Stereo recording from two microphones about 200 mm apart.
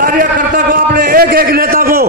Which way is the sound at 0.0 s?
45° right (ahead or behind).